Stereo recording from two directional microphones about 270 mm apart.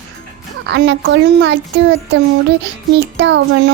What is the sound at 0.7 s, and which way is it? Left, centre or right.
Speech, right.